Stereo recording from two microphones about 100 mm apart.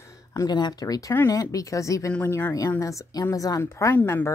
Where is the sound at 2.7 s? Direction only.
35° left (ahead or behind).